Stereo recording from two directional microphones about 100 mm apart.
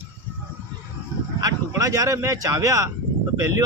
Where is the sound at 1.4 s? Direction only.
35° right (ahead or behind).